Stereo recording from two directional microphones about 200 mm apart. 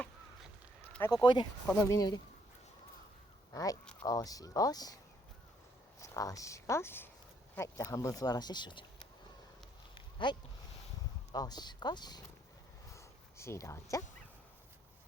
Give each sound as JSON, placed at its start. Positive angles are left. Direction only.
{"t": 1.1, "sound": "speech", "side_deg": 25}
{"t": 1.6, "sound": "speech", "side_deg": 10}
{"t": 3.5, "sound": "speech", "side_deg": 20}
{"t": 6.0, "sound": "speech", "side_deg": 15}
{"t": 9.9, "sound": "a sound", "side_deg": 25}
{"t": 11.3, "sound": "speech", "side_deg": 20}
{"t": 12.9, "sound": "a sound", "side_deg": 15}